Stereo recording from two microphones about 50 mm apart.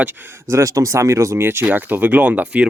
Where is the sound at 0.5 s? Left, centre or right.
Right.